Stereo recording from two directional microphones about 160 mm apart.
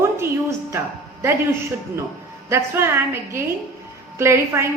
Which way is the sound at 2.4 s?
15° right (ahead or behind).